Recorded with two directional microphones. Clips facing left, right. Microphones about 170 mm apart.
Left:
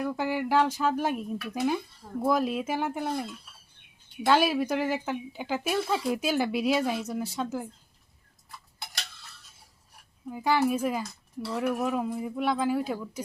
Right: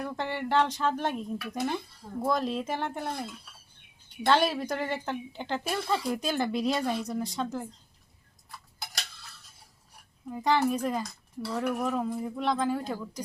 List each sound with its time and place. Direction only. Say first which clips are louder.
0.0 s speech: left 4 dB; 5° left (ahead or behind)
10.2 s speech: left 1 dB; 5° left (ahead or behind)